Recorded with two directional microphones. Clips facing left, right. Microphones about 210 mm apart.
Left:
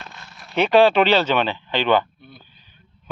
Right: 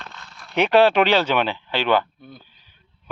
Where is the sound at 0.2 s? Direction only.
20° left (ahead or behind).